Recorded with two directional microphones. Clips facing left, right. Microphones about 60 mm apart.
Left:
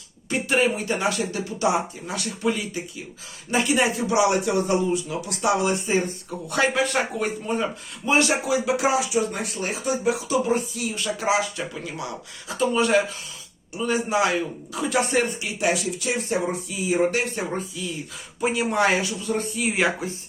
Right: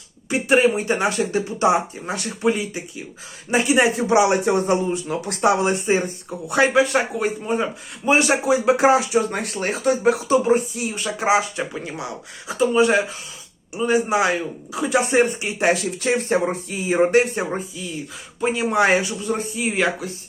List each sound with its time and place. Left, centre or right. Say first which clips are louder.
0.3 s speech: right 5 dB; right
6.5 s a man's voice: right 5 dB; centre
8.0 s speech: right 4 dB; right
10.2 s speech: right 5 dB; right
12.5 s a man's voice: right 4 dB; centre
14.7 s a man's voice: right 4 dB; centre
15.1 s speech: right 5 dB; right
18.3 s speech: right 2 dB; centre
18.8 s speech: right 4 dB; right
19.5 s speech: right 1 dB; centre